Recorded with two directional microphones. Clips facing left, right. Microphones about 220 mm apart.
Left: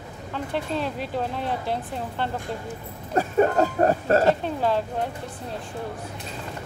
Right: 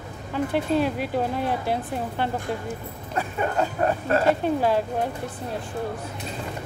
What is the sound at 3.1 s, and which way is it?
Speech, 40° left (ahead or behind).